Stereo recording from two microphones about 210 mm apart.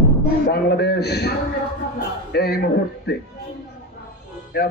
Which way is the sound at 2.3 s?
50° left (ahead or behind).